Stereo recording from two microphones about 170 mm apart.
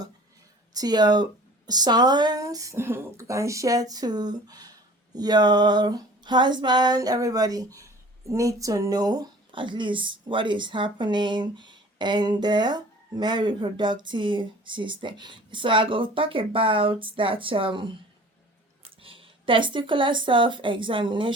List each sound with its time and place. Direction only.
0.7 s speech: 25° right (ahead or behind)